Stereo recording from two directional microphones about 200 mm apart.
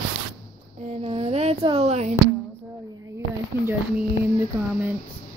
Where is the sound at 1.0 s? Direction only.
30° right (ahead or behind).